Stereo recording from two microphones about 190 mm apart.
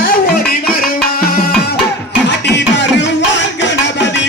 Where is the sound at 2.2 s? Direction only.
65° left (ahead or behind).